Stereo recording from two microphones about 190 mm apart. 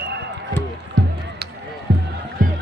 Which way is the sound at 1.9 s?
60° right (ahead or behind).